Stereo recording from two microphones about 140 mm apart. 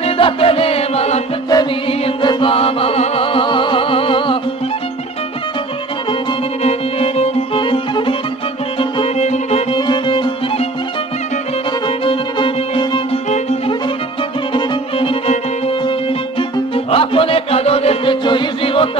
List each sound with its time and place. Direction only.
0.0 s music: 40° left (ahead or behind)
1.5 s music: 35° left (ahead or behind)
6.6 s music: 45° left (ahead or behind)
9.8 s music: 35° left (ahead or behind)
12.0 s violin: 40° left (ahead or behind)
14.5 s violin: 40° left (ahead or behind)
16.3 s music: 40° left (ahead or behind)